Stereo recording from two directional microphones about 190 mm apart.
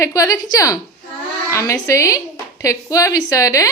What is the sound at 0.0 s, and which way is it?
A woman's voice, 20° left (ahead or behind).